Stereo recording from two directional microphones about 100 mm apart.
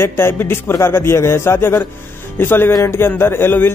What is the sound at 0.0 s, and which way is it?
Speech, 25° left (ahead or behind).